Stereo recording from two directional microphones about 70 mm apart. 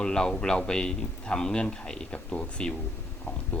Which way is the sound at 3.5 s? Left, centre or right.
Left.